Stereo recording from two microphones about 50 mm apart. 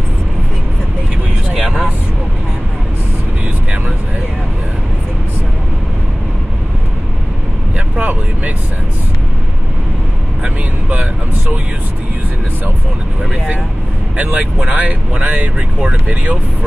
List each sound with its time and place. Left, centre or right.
1.5 s vehicle: right
8.0 s vehicle: right
10.4 s vehicle: right
14.1 s vehicle: right